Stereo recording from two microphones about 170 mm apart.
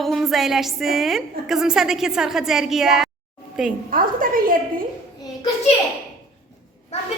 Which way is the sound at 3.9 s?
55° right (ahead or behind).